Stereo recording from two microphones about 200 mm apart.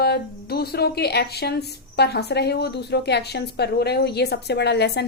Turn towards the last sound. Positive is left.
turn(degrees=55)  # may be behind; listen again after turning